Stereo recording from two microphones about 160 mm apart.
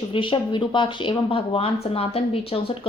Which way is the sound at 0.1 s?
30° left (ahead or behind).